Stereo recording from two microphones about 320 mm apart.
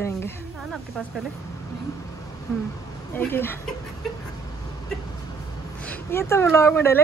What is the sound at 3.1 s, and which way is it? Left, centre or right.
Speech, centre.